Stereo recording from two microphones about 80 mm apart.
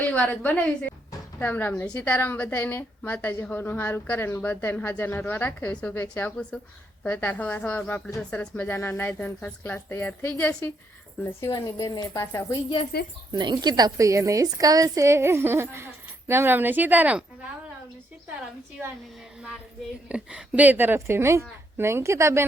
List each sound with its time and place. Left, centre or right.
0.0 s a woman's voice: centre
6.5 s a woman's voice: centre
11.4 s speech: left
13.3 s a woman's voice: right
20.1 s a woman's voice: centre; by 22.4 s right